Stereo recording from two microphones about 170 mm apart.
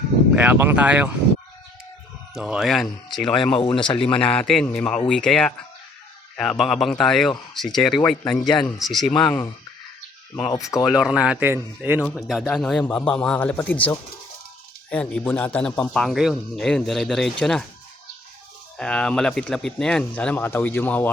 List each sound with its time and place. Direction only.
0.3 s a man's voice: 10° right (ahead or behind)
2.3 s a man's voice: 5° right (ahead or behind)
3.5 s speech: 30° left (ahead or behind)
4.2 s a man's voice: 5° left (ahead or behind)
8.2 s speech: 15° left (ahead or behind)
8.6 s a man's voice: centre (ahead or behind)
10.3 s speech: 15° left (ahead or behind)
10.9 s a man's voice: 5° right (ahead or behind)
12.1 s a man's voice: centre (ahead or behind)
18.8 s a man's voice: 5° left (ahead or behind)